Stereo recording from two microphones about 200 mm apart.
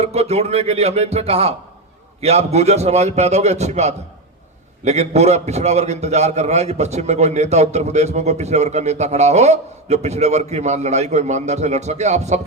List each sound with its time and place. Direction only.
0.0 s a man's voice: 30° right (ahead or behind)